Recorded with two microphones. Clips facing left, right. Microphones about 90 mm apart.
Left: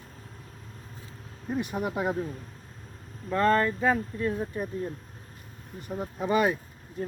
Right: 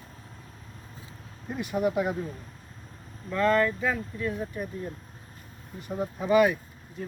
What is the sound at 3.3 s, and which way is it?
Speech, 40° left (ahead or behind).